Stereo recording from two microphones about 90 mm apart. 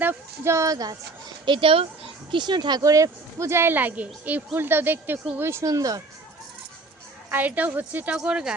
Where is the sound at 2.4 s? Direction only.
55° right (ahead or behind); by 5.6 s 30° right (ahead or behind).